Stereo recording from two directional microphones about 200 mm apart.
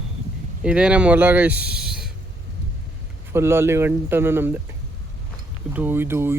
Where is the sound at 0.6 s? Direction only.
5° right (ahead or behind).